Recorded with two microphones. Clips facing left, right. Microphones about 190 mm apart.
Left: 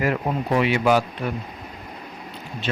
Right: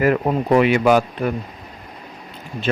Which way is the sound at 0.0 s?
55° right (ahead or behind).